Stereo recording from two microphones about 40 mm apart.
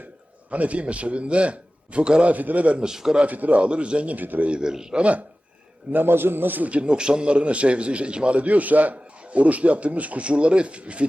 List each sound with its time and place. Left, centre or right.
0.5 s a man's voice: right
2.3 s a man's voice: right
2.8 s a man's voice: centre
3.2 s a man's voice: right
3.6 s a man's voice: right
4.6 s a man's voice: centre
4.9 s a man's voice: right
5.9 s a man's voice: right
6.7 s a man's voice: right